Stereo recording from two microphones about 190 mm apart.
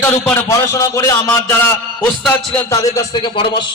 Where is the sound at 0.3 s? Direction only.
15° left (ahead or behind).